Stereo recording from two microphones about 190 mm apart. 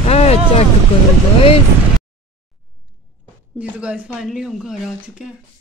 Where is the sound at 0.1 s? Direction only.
35° left (ahead or behind).